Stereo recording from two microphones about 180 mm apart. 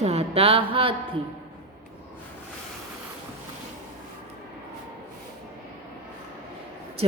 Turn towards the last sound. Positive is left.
turn(degrees=-30)  # may be behind; listen again after turning